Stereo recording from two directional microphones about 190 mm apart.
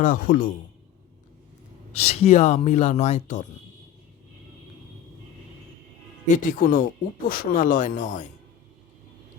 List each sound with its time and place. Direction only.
0.0 s speech: 45° left (ahead or behind)
1.9 s speech: 35° left (ahead or behind)
6.2 s speech: 45° left (ahead or behind)